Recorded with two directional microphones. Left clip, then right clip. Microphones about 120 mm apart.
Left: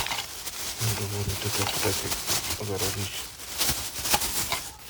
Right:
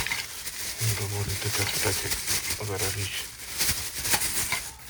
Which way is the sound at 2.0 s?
50° left (ahead or behind).